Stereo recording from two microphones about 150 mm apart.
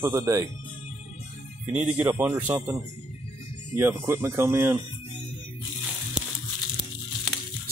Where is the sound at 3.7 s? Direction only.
15° right (ahead or behind).